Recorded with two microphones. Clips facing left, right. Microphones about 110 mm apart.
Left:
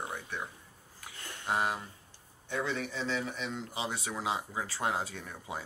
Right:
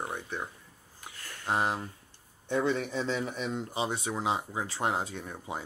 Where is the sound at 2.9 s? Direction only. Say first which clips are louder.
Right 3 dB; 20° right (ahead or behind).